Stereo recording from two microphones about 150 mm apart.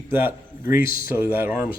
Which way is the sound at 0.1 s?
15° right (ahead or behind).